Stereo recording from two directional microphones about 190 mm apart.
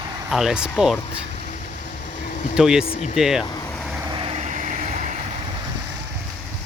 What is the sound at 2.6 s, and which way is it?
Speech, 5° right (ahead or behind).